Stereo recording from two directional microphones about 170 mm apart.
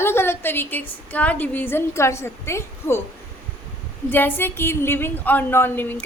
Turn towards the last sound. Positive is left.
turn(degrees=10)  # may be behind; listen again after turning